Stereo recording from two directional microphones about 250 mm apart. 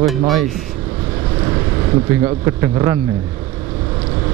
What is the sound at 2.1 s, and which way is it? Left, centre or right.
Speech, centre.